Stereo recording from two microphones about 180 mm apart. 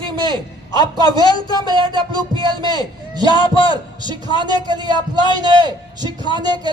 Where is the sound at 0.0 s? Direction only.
25° right (ahead or behind).